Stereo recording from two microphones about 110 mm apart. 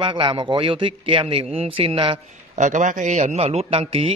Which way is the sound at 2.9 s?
90° right.